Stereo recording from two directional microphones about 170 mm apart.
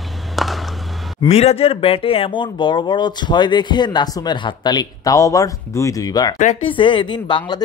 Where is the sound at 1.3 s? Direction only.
40° left (ahead or behind).